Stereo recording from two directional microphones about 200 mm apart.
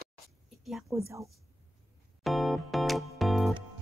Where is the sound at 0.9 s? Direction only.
10° right (ahead or behind).